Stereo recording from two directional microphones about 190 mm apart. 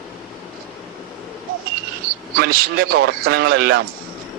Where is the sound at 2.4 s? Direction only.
50° right (ahead or behind).